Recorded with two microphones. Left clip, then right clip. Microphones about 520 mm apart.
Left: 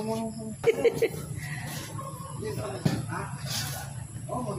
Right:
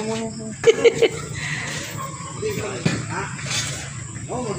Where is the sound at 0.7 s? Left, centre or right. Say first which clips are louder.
Right 9 dB; left.